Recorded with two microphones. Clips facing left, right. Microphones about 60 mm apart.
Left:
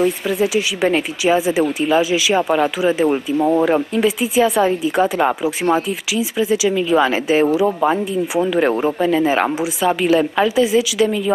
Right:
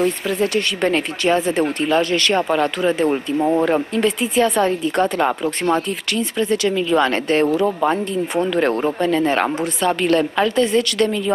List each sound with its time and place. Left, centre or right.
0.0 s speech: centre